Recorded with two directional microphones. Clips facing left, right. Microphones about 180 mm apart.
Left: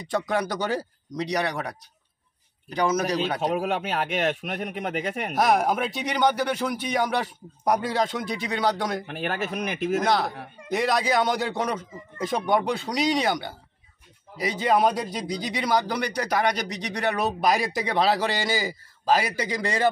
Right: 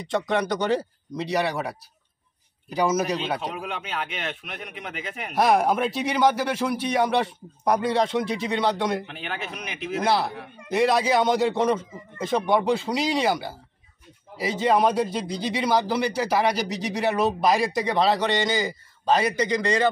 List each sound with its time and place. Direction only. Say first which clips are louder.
0.1 s a man's voice: right 2 dB; centre (ahead or behind)
3.5 s speech: left 6 dB; 45° left (ahead or behind)
5.3 s speech: right 2 dB; centre (ahead or behind)
9.0 s speech: left 5 dB; 50° left (ahead or behind)
10.0 s speech: right 1 dB; 5° right (ahead or behind)